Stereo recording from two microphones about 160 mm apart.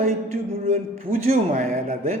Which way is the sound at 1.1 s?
55° right (ahead or behind).